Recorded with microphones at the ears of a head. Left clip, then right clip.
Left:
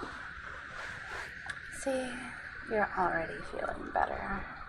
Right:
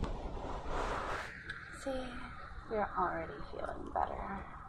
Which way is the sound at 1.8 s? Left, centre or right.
Left.